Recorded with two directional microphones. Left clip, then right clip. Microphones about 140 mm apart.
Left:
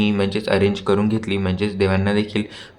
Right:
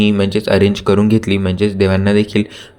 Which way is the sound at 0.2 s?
35° right (ahead or behind).